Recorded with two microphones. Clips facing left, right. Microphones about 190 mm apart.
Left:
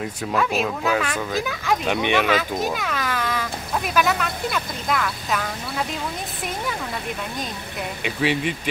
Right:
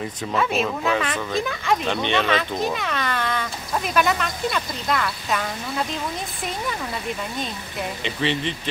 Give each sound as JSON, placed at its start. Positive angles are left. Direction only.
{"t": 0.0, "sound": "speech", "side_deg": 0}
{"t": 1.9, "sound": "speech", "side_deg": 10}
{"t": 8.0, "sound": "speech", "side_deg": 10}